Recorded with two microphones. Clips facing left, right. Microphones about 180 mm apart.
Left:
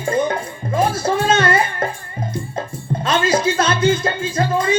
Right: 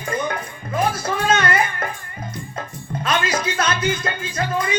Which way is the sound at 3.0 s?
25° left (ahead or behind).